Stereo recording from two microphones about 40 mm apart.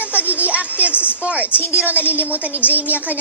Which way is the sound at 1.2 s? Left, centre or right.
Right.